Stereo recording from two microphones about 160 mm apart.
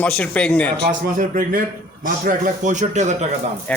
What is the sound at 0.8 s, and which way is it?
A man's voice, 60° right (ahead or behind).